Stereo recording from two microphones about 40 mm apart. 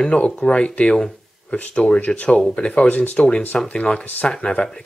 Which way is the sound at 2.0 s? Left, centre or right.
Left.